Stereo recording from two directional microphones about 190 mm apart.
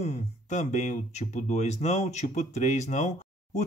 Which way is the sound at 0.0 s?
40° left (ahead or behind).